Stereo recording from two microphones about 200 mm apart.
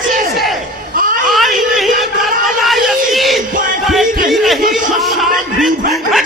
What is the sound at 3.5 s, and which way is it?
Music, 40° right (ahead or behind).